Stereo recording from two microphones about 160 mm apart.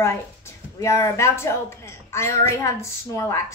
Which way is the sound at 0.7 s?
20° left (ahead or behind).